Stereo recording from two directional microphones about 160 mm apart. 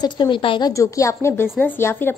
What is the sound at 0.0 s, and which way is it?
A woman's voice, 25° left (ahead or behind).